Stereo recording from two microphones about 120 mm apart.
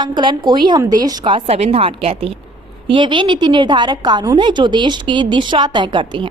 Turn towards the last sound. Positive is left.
turn(degrees=-40)  # may be behind; listen again after turning